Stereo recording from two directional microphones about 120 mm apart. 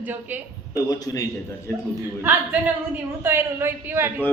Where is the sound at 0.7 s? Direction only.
30° left (ahead or behind).